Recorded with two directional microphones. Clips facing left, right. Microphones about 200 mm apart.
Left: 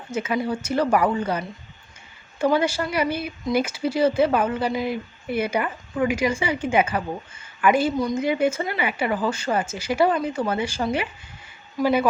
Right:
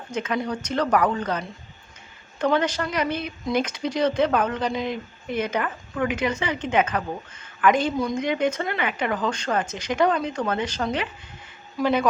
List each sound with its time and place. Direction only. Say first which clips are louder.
0.1 s a woman's voice: left 2 dB; 5° left (ahead or behind)